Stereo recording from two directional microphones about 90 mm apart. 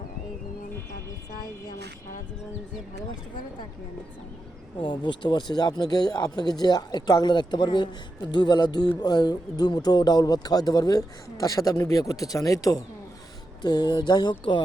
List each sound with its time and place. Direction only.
4.8 s speech: 60° left (ahead or behind); by 12.8 s 40° left (ahead or behind)
13.6 s speech: 55° left (ahead or behind)